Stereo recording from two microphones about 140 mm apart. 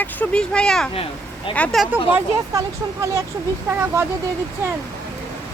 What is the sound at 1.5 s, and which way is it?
Speech, 5° left (ahead or behind).